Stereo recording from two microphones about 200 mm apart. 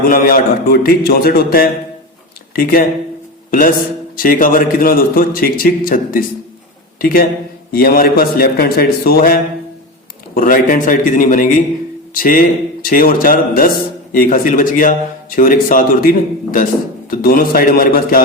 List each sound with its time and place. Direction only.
0.1 s a man's voice: 45° left (ahead or behind)
4.2 s a man's voice: 45° left (ahead or behind)